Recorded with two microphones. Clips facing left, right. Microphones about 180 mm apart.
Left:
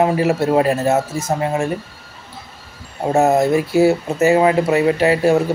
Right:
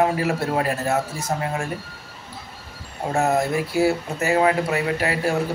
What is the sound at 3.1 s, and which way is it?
A man's voice, 25° left (ahead or behind).